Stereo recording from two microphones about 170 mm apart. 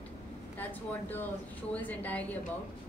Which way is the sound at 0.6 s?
10° left (ahead or behind).